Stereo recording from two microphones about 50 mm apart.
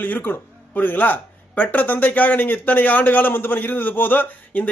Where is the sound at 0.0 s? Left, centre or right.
Left.